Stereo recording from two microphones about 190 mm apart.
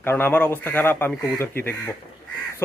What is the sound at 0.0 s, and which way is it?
Speech, 10° left (ahead or behind).